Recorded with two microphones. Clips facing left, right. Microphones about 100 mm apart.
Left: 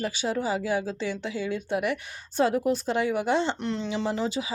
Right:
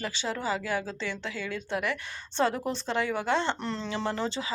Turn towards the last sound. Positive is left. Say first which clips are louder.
# left 3 dB
turn(degrees=10)  # may be behind; listen again after turning